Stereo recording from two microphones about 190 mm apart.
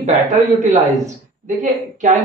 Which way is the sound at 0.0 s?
40° right (ahead or behind).